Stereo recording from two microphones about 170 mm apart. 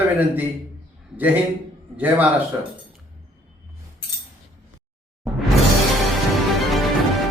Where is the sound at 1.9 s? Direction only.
10° right (ahead or behind).